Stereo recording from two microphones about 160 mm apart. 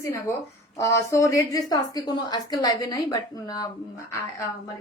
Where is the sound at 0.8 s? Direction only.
20° left (ahead or behind).